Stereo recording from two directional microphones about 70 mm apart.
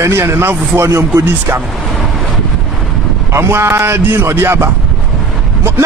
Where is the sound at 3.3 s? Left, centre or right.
Right.